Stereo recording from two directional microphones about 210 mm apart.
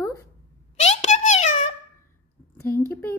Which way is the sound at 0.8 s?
30° left (ahead or behind).